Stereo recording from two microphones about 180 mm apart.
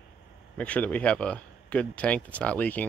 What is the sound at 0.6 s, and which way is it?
Speech, 10° left (ahead or behind).